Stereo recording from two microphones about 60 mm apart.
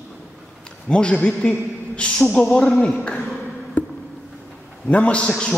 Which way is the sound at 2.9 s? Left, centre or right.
Centre.